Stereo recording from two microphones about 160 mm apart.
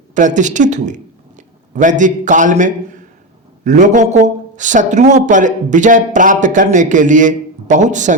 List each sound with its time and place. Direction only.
0.1 s speech: 50° right (ahead or behind)